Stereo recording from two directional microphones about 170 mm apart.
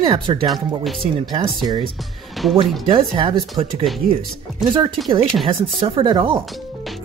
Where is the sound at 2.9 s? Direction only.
30° right (ahead or behind).